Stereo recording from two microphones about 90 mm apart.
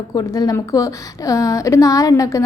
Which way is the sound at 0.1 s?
45° left (ahead or behind).